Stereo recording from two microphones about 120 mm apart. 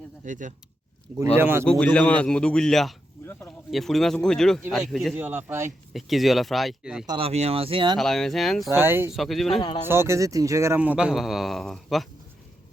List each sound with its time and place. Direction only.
0.3 s speech: 90° right
1.4 s speech: 20° right (ahead or behind)
1.6 s a man's voice: 10° left (ahead or behind)
5.1 s speech: 15° right (ahead or behind)
5.9 s a man's voice: centre (ahead or behind)
7.2 s speech: 60° right (ahead or behind)
7.9 s a man's voice: 5° left (ahead or behind)
8.7 s speech: 20° right (ahead or behind)
9.1 s a man's voice: centre (ahead or behind)
9.8 s speech: 20° right (ahead or behind)
10.8 s a man's voice: 10° right (ahead or behind)